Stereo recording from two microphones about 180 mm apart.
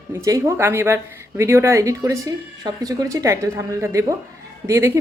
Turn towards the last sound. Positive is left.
turn(degrees=-15)  # may be behind; listen again after turning